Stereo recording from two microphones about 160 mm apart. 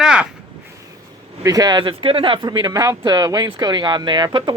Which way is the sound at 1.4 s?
25° right (ahead or behind).